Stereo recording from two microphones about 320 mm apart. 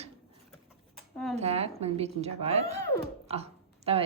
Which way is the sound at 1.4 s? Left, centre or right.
Centre.